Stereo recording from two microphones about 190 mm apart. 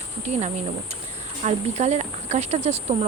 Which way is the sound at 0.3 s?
35° right (ahead or behind).